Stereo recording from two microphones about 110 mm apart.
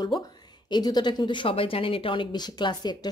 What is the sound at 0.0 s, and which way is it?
A woman's voice, 35° left (ahead or behind).